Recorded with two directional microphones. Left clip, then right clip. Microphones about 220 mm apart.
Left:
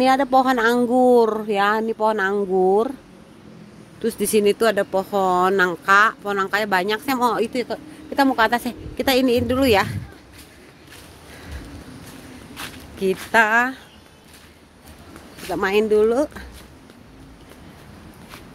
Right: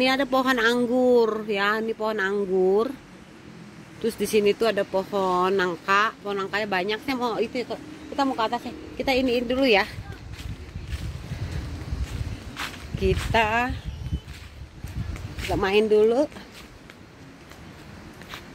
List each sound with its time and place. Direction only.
0.0 s speech: 10° left (ahead or behind)
4.0 s speech: 10° left (ahead or behind)
12.5 s speech: 10° left (ahead or behind)
15.4 s speech: 5° left (ahead or behind)